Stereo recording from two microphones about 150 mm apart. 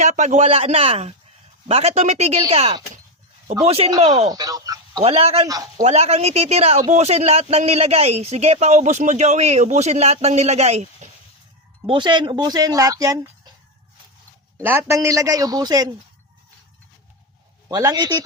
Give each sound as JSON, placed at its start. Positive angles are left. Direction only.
{"t": 0.0, "sound": "a man's voice", "side_deg": -55}
{"t": 3.8, "sound": "speech", "side_deg": -40}
{"t": 4.3, "sound": "a sound", "side_deg": -25}
{"t": 5.0, "sound": "a man's voice", "side_deg": -40}
{"t": 11.9, "sound": "speech", "side_deg": -30}
{"t": 14.6, "sound": "speech", "side_deg": -15}
{"t": 17.7, "sound": "speech", "side_deg": -25}